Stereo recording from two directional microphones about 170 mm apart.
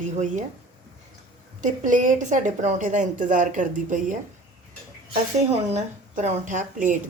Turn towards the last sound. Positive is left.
turn(degrees=-50)  # may be behind; listen again after turning